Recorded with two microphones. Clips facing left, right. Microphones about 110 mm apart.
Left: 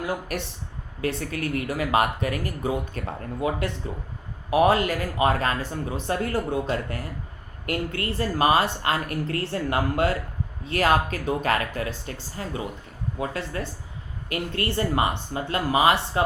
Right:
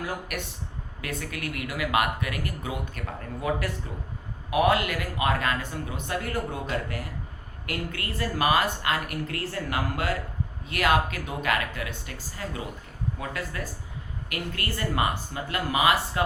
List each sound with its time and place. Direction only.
0.3 s speech: 30° left (ahead or behind)